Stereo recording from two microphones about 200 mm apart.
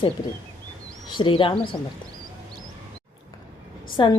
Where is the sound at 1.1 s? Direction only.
25° left (ahead or behind).